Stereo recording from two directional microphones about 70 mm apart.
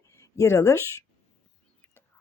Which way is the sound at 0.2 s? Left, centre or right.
Left.